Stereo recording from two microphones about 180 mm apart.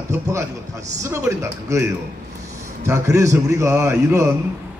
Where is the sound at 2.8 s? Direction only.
15° right (ahead or behind).